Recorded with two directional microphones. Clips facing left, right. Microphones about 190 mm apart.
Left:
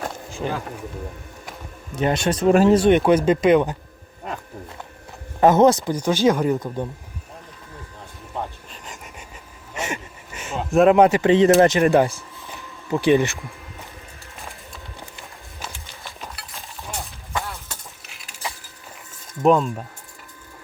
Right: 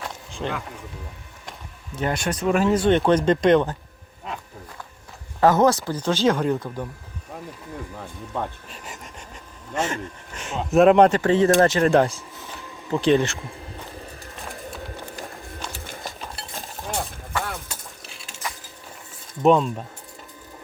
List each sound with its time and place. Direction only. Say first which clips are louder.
0.4 s speech: left 2 dB; 10° left (ahead or behind)
2.0 s speech: left 4 dB; 20° left (ahead or behind)
3.0 s speech: left 2 dB; 5° left (ahead or behind)
5.4 s speech: left 3 dB; 20° left (ahead or behind)
9.7 s speech: right 3 dB; 10° left (ahead or behind)
11.2 s speech: left 3 dB; 20° left (ahead or behind)
11.9 s speech: left 1 dB; 5° left (ahead or behind)
16.0 s a sound: right 2 dB; 30° right (ahead or behind)
18.0 s a sound: right 3 dB; 30° right (ahead or behind)
19.4 s speech: even; centre (ahead or behind)